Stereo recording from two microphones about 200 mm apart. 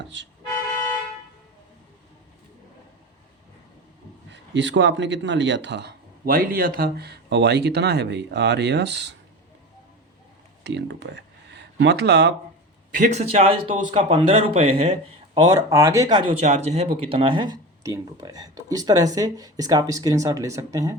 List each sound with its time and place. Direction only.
0.0 s speech: 65° right (ahead or behind)
4.3 s speech: 65° right (ahead or behind)
10.6 s speech: 60° right (ahead or behind)
13.0 s speech: 30° right (ahead or behind)
15.4 s speech: 15° right (ahead or behind)